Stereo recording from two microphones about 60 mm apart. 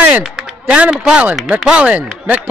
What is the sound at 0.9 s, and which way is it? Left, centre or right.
A man's voice, centre.